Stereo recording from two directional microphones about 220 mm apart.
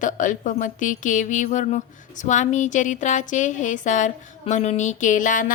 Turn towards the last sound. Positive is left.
turn(degrees=35)  # may be behind; listen again after turning